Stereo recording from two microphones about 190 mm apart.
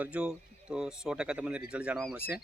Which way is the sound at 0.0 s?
5° right (ahead or behind).